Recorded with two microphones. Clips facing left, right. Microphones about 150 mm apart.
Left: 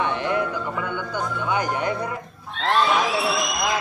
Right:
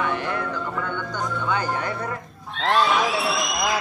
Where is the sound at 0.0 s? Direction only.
20° left (ahead or behind).